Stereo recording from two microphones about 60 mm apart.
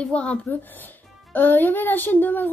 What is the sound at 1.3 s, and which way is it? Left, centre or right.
Speech, left.